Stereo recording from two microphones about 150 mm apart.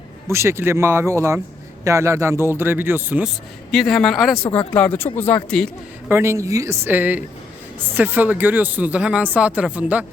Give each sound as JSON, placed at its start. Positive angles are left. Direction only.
{"t": 0.3, "sound": "speech", "side_deg": -20}
{"t": 3.7, "sound": "speech", "side_deg": 0}
{"t": 6.1, "sound": "speech", "side_deg": -15}